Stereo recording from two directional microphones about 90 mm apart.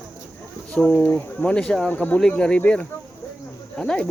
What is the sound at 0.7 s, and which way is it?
Speech, 10° left (ahead or behind).